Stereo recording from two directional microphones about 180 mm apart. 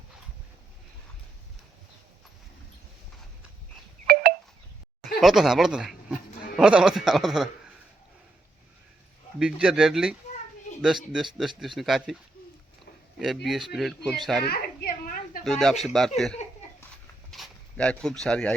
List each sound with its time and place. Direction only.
4.0 s a sound: 60° right (ahead or behind)
5.0 s speech: centre (ahead or behind)
9.4 s speech: 5° right (ahead or behind)
13.1 s speech: centre (ahead or behind)
14.4 s a sound: 60° left (ahead or behind)
15.4 s speech: centre (ahead or behind)